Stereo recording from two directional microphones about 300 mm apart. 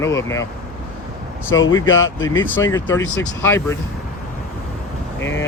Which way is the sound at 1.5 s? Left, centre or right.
Centre.